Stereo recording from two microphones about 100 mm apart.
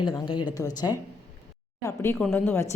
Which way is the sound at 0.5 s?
35° left (ahead or behind).